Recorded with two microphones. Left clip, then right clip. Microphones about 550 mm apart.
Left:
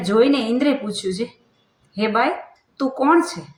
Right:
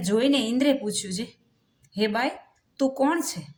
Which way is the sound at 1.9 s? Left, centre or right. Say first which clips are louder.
Left 6 dB; right.